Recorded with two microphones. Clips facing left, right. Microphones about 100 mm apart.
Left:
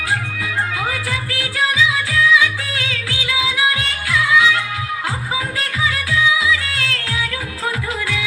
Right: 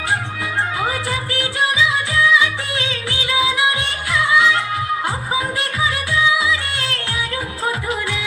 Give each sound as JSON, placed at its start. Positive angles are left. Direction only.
{"t": 0.8, "sound": "music", "side_deg": -25}